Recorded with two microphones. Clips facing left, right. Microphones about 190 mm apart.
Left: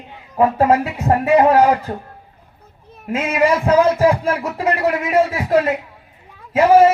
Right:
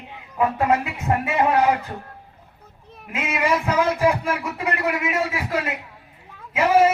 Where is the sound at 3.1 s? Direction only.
40° left (ahead or behind).